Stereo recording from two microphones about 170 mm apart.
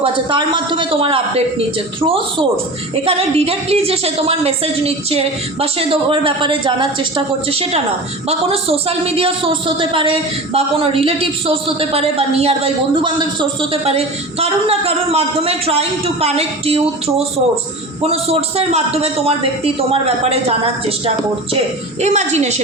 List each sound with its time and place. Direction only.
0.0 s a woman's voice: 30° right (ahead or behind)
22.0 s a woman's voice: 40° right (ahead or behind)